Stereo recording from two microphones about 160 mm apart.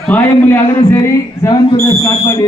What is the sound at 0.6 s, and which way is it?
Speech, 30° left (ahead or behind).